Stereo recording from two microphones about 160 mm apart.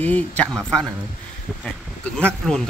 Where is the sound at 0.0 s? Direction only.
10° left (ahead or behind).